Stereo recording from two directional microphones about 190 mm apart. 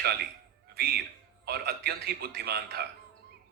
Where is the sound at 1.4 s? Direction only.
55° right (ahead or behind).